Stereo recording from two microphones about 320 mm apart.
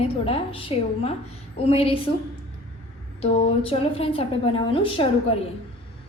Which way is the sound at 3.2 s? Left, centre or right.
Centre.